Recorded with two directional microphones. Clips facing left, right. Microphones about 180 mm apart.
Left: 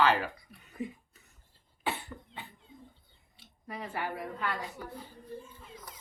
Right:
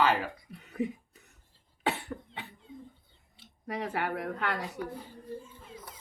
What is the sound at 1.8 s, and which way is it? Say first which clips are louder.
Cough: right 4 dB; 70° right (ahead or behind).